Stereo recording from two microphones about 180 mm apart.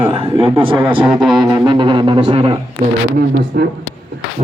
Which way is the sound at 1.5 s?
25° right (ahead or behind).